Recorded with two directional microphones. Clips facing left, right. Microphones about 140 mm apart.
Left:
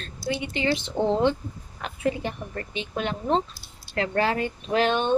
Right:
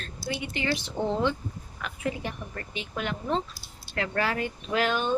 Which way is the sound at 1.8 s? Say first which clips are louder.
Left 5 dB; 30° left (ahead or behind).